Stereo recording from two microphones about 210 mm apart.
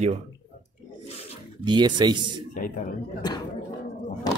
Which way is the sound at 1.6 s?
20° right (ahead or behind).